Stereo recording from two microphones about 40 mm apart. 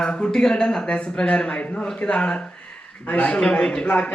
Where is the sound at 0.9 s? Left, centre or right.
Left.